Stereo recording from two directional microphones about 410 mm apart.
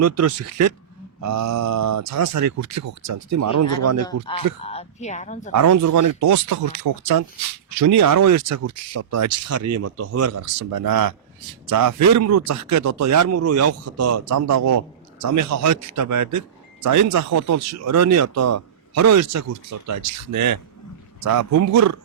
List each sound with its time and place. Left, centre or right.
0.0 s speech: right
4.0 s speech: centre
5.5 s speech: right